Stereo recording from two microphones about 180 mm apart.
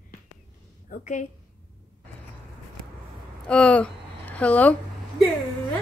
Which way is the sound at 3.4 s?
5° left (ahead or behind).